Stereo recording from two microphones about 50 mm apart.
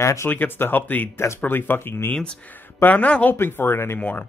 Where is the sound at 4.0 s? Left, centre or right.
Left.